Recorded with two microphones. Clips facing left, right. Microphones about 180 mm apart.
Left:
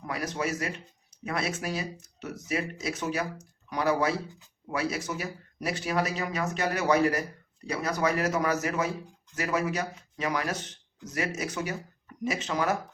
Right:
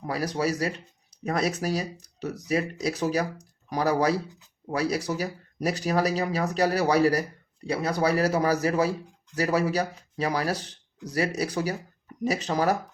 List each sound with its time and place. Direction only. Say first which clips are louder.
0.0 s speech: right 5 dB; 35° right (ahead or behind)